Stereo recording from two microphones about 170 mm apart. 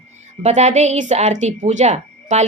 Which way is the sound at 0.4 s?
40° right (ahead or behind).